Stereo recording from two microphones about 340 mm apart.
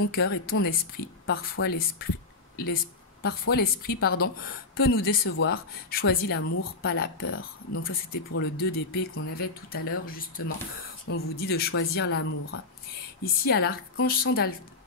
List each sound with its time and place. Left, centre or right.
0.1 s a woman's voice: left
13.2 s a woman's voice: left